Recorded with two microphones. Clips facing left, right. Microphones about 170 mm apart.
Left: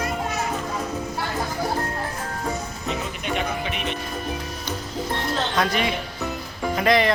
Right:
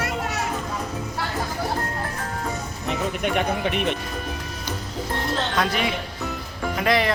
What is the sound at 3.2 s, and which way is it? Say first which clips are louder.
Speech: right 3 dB; 55° right (ahead or behind).